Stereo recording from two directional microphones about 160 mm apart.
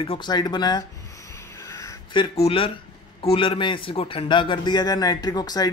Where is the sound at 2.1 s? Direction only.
35° left (ahead or behind).